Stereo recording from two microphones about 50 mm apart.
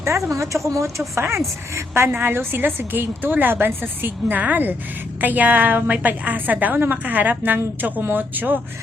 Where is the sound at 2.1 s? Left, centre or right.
Right.